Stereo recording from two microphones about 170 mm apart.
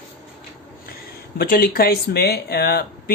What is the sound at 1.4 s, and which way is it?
Speech, 55° left (ahead or behind).